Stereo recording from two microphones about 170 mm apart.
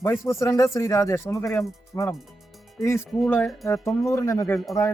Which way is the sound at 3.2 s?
5° left (ahead or behind).